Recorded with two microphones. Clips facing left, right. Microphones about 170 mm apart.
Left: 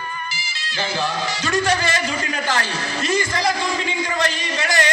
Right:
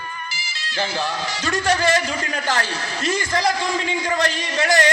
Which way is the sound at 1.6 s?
40° right (ahead or behind).